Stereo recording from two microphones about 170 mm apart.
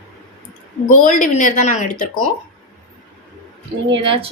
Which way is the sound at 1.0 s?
50° left (ahead or behind).